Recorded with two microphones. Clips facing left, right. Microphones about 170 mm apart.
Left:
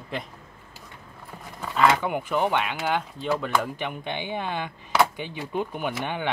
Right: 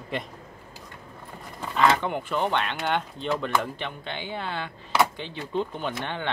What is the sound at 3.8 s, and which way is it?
Speech, 15° left (ahead or behind).